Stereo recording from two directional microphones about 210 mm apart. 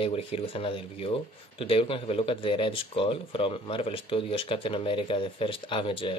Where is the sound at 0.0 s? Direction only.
25° left (ahead or behind).